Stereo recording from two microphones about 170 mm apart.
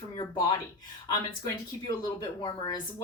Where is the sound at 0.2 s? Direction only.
25° left (ahead or behind).